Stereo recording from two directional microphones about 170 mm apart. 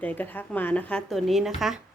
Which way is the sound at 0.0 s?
10° left (ahead or behind).